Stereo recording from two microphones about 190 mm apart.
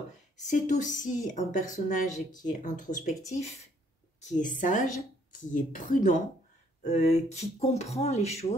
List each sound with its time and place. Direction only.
0.5 s speech: 40° left (ahead or behind)
4.2 s a woman's voice: 40° left (ahead or behind)